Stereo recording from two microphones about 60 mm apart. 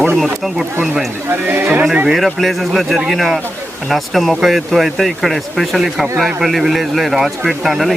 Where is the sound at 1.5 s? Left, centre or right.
Right.